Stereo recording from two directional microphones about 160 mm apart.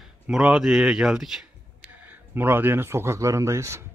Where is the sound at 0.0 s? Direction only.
5° right (ahead or behind).